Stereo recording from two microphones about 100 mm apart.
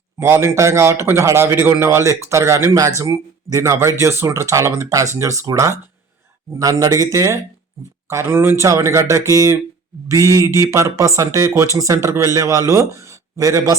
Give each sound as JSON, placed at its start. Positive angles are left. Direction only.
{"t": 0.2, "sound": "speech", "side_deg": -25}